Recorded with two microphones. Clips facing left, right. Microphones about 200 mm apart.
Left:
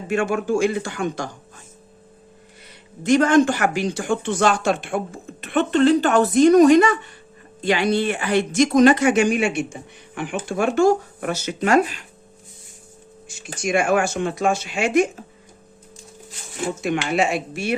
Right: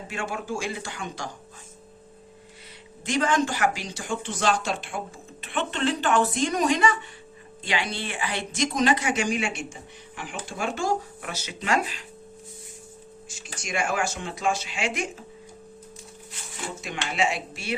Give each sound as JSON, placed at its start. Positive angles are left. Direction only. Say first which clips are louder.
{"t": 0.1, "sound": "speech", "louder": "left 11 dB", "side_deg": 55}
{"t": 3.0, "sound": "speech", "louder": "left 9 dB", "side_deg": 50}
{"t": 6.4, "sound": "speech", "louder": "left 11 dB", "side_deg": 50}
{"t": 13.2, "sound": "speech", "louder": "left 13 dB", "side_deg": 55}
{"t": 16.8, "sound": "speech", "louder": "left 6 dB", "side_deg": 55}